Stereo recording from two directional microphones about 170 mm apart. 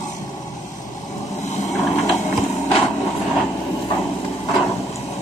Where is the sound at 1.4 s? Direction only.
45° left (ahead or behind).